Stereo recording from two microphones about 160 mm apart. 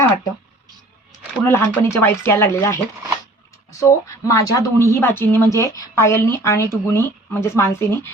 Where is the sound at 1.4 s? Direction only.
15° left (ahead or behind).